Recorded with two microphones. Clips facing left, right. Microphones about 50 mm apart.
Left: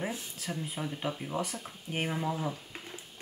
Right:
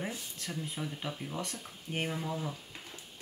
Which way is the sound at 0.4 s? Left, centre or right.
Centre.